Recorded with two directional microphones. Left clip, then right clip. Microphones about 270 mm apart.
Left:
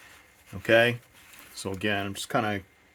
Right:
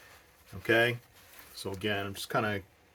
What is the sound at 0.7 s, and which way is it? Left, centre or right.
Speech, left.